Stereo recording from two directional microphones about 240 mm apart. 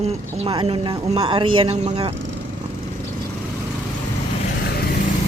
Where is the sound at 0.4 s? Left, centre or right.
Right.